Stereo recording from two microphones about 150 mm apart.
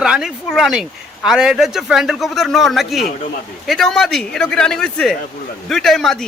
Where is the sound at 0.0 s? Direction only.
5° right (ahead or behind).